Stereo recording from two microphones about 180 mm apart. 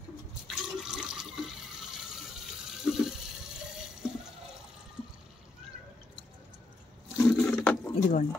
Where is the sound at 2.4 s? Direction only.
Centre (ahead or behind).